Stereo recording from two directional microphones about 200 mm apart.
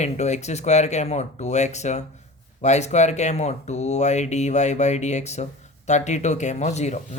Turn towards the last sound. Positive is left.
turn(degrees=35)  # may be behind; listen again after turning